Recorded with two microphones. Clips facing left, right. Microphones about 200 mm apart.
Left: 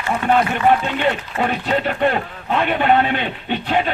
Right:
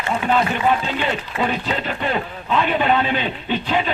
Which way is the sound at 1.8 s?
55° left (ahead or behind).